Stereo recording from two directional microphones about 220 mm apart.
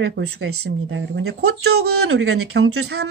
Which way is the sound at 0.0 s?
50° right (ahead or behind).